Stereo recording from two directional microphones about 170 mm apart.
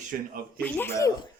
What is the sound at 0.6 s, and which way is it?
Speech, 10° left (ahead or behind).